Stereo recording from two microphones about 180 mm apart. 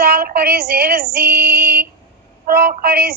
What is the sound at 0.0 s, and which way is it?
Music, 60° right (ahead or behind).